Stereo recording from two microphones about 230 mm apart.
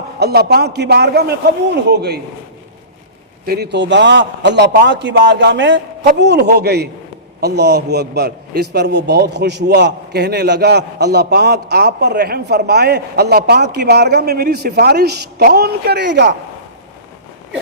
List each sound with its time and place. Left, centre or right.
0.2 s a man's voice: right
3.4 s a man's voice: right